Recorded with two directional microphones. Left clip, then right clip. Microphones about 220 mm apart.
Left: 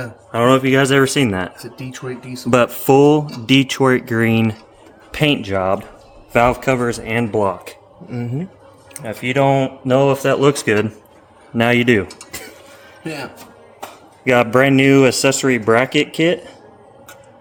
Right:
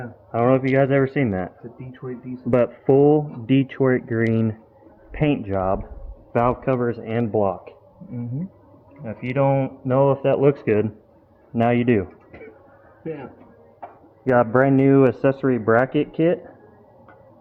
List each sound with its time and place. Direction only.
0.3 s speech: 20° left (ahead or behind)
9.0 s speech: centre (ahead or behind); by 11.9 s 25° left (ahead or behind)
14.3 s speech: 30° left (ahead or behind)